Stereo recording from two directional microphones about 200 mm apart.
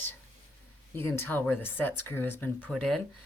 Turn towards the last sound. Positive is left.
turn(degrees=0)  # may be behind; listen again after turning